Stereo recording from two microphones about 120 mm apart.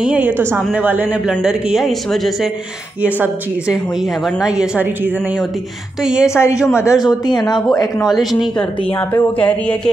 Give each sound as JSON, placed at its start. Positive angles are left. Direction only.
{"t": 0.0, "sound": "a woman's voice", "side_deg": -10}
{"t": 6.2, "sound": "a man's voice", "side_deg": 25}
{"t": 8.0, "sound": "speech", "side_deg": 0}
{"t": 8.9, "sound": "speech", "side_deg": 15}